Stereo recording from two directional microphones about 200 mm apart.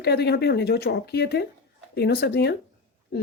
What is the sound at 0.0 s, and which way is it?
Speech, 55° left (ahead or behind).